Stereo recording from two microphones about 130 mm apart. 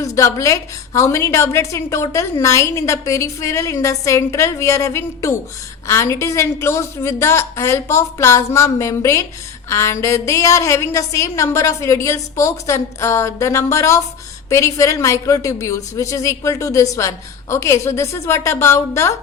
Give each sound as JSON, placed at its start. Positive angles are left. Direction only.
{"t": 0.0, "sound": "a woman's voice", "side_deg": 25}